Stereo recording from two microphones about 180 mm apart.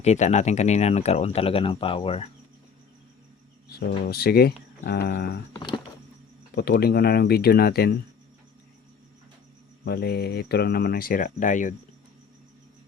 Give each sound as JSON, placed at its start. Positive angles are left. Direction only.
{"t": 0.0, "sound": "speech", "side_deg": 40}
{"t": 3.7, "sound": "speech", "side_deg": 60}
{"t": 5.5, "sound": "a sound", "side_deg": 25}
{"t": 6.6, "sound": "speech", "side_deg": 60}
{"t": 9.8, "sound": "speech", "side_deg": 60}